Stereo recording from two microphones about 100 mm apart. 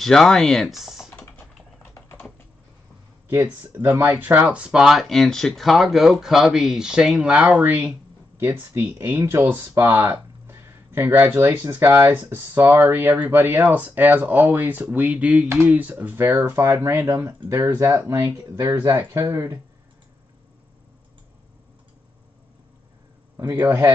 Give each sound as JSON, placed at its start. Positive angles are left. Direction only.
{"t": 0.0, "sound": "speech", "side_deg": 5}
{"t": 1.1, "sound": "typing", "side_deg": 20}
{"t": 3.3, "sound": "speech", "side_deg": -15}
{"t": 23.3, "sound": "a man's voice", "side_deg": -20}